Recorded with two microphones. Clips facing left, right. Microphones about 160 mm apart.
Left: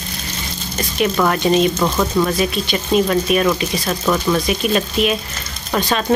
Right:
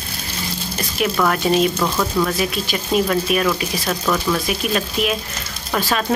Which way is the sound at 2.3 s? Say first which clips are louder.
Left 3 dB; centre (ahead or behind).